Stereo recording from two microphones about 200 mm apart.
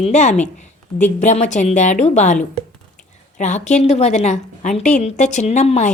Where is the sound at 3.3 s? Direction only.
35° left (ahead or behind).